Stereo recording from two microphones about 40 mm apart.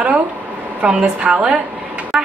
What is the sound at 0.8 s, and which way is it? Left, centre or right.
Speech, right.